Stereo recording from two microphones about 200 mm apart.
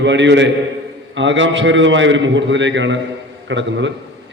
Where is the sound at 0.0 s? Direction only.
65° right (ahead or behind).